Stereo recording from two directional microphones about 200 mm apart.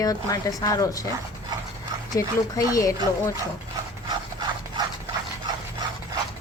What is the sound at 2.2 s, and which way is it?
Speech, 15° left (ahead or behind).